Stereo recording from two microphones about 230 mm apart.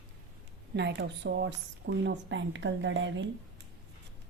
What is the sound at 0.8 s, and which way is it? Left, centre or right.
A woman's voice, right.